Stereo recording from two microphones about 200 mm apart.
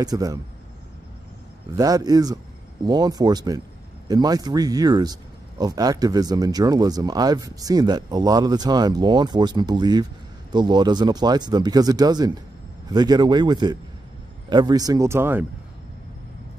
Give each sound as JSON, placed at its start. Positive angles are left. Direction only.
{"t": 0.0, "sound": "speech", "side_deg": -20}
{"t": 1.8, "sound": "a man's voice", "side_deg": -20}